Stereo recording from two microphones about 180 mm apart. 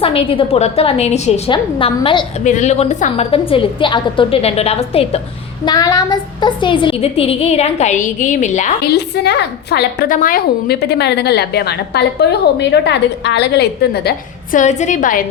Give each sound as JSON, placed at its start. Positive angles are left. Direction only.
{"t": 0.0, "sound": "a woman's voice", "side_deg": 30}
{"t": 1.5, "sound": "a woman's voice", "side_deg": 25}
{"t": 2.4, "sound": "a woman's voice", "side_deg": 40}
{"t": 5.6, "sound": "a woman's voice", "side_deg": 20}
{"t": 8.9, "sound": "a woman's voice", "side_deg": 65}
{"t": 14.6, "sound": "a woman's voice", "side_deg": 40}